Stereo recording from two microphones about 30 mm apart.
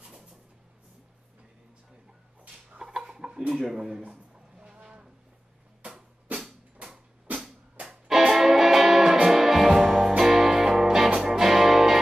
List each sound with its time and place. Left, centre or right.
2.8 s chicken: centre
3.5 s speech: centre
4.1 s a sound: right
6.3 s music: right
8.2 s music: centre